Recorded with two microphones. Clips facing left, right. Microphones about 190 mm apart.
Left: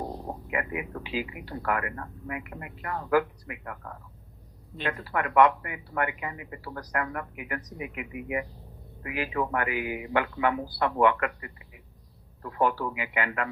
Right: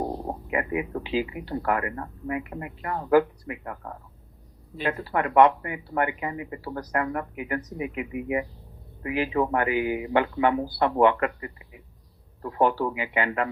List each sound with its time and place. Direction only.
0.5 s speech: 30° right (ahead or behind)